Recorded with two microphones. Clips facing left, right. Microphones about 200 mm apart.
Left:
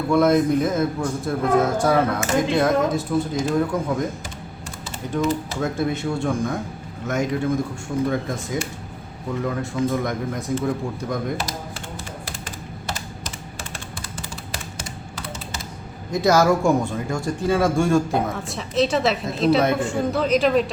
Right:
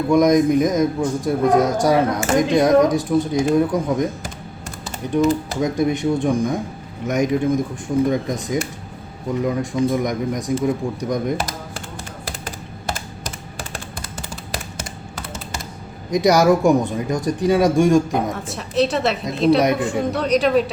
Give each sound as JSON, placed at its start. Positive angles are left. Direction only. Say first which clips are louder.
{"t": 0.1, "sound": "speech", "louder": "right 3 dB", "side_deg": -15}
{"t": 5.1, "sound": "speech", "louder": "right 5 dB", "side_deg": -15}
{"t": 16.1, "sound": "speech", "louder": "right 3 dB", "side_deg": -15}
{"t": 18.4, "sound": "speech", "louder": "right 2 dB", "side_deg": 0}